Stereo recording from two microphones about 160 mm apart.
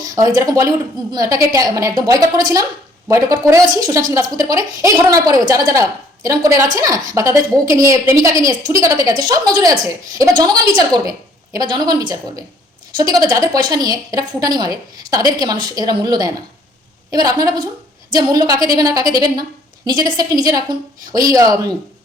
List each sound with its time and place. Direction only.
0.0 s a woman's voice: 20° right (ahead or behind)